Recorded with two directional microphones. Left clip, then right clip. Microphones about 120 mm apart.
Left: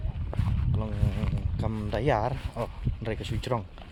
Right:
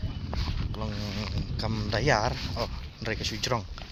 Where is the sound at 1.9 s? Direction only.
20° left (ahead or behind).